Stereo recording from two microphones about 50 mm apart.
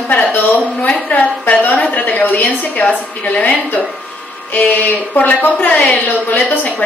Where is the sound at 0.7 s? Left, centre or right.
Left.